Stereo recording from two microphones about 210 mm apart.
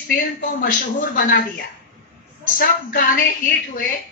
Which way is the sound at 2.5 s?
40° left (ahead or behind).